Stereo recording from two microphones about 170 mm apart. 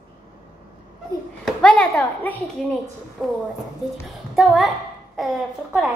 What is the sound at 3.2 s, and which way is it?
A child's voice, centre (ahead or behind).